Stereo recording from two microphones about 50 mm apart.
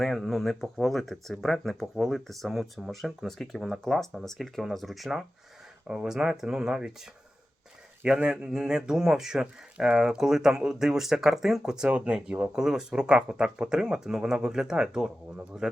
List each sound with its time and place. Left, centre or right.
0.0 s speech: centre
5.9 s speech: centre
8.0 s speech: centre
11.9 s speech: right
12.5 s speech: centre